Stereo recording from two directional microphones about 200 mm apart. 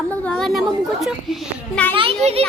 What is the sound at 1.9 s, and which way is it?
Children playing, 25° right (ahead or behind).